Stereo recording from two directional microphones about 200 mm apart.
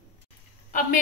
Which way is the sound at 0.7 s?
40° left (ahead or behind).